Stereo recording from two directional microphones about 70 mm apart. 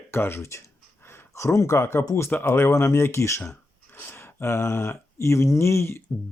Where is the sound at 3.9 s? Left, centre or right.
Left.